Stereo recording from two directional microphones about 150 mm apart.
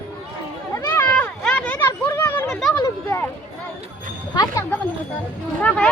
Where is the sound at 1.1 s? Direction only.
5° left (ahead or behind).